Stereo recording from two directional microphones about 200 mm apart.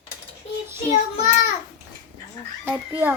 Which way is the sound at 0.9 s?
35° left (ahead or behind).